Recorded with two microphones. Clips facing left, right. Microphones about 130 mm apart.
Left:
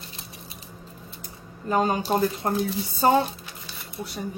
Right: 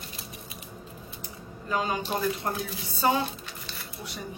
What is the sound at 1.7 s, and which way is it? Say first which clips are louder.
Speech: left 6 dB; 45° left (ahead or behind).